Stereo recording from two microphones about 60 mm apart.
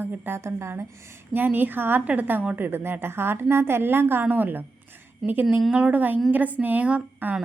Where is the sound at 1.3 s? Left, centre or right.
Right.